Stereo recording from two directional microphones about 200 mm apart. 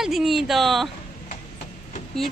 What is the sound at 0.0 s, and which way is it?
Speech, centre (ahead or behind).